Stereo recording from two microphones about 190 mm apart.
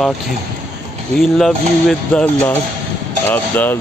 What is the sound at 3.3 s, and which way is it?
Mantra, 10° left (ahead or behind).